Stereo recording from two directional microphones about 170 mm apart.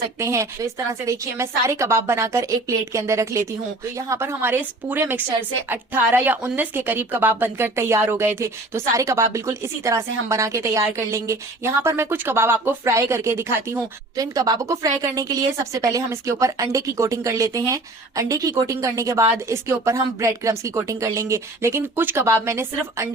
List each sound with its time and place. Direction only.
0.2 s speech: 15° right (ahead or behind)